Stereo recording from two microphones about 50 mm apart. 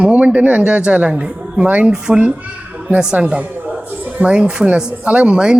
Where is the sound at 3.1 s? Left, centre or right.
Right.